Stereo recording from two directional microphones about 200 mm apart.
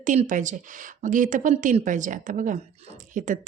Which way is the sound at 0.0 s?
40° right (ahead or behind).